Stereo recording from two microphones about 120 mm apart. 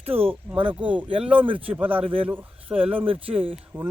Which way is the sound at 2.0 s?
50° right (ahead or behind).